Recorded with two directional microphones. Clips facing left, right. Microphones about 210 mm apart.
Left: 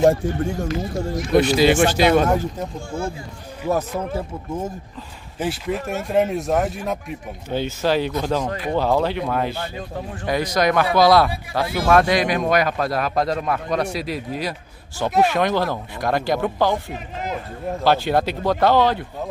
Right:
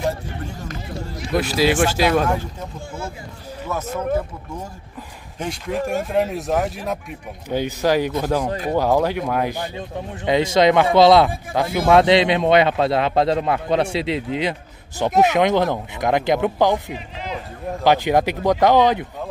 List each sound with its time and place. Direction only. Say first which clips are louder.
0.0 s speech: left 9 dB; 50° left (ahead or behind)
1.3 s speech: left 3 dB; centre (ahead or behind)
5.4 s speech: even; 5° left (ahead or behind)
7.4 s speech: right 2 dB; 15° right (ahead or behind)
17.8 s speech: right 2 dB; 15° right (ahead or behind)